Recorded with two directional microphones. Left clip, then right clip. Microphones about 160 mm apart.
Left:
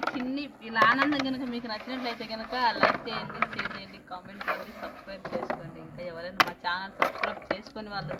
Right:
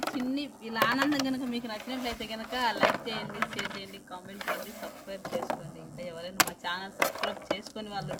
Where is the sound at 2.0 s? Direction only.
45° right (ahead or behind).